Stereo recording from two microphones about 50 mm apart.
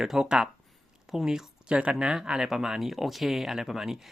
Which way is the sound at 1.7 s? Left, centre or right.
Right.